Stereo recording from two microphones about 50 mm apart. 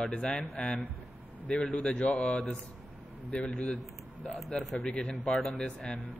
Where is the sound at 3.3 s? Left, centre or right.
Left.